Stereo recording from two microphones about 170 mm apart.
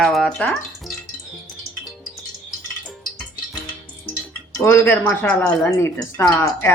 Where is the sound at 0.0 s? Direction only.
Centre (ahead or behind).